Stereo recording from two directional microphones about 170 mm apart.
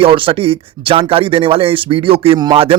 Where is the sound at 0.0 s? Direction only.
30° right (ahead or behind).